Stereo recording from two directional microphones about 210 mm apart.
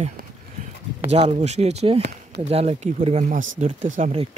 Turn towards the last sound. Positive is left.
turn(degrees=-30)  # may be behind; listen again after turning